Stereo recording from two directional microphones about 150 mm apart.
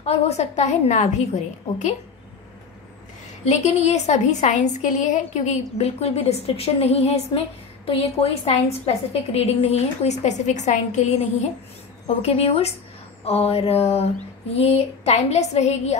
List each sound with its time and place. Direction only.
0.0 s a woman's voice: 45° left (ahead or behind)
3.4 s a woman's voice: 50° left (ahead or behind)